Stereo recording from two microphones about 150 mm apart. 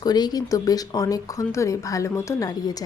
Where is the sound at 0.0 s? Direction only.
25° left (ahead or behind).